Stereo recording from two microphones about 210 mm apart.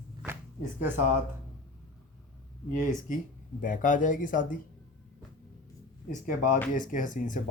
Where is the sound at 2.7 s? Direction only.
40° left (ahead or behind).